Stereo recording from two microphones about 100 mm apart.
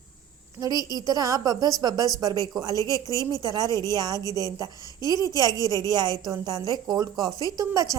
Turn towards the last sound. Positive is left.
turn(degrees=-35)  # may be behind; listen again after turning